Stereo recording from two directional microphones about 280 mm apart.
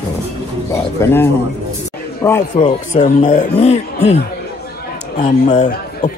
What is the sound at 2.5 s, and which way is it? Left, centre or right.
Speech, left.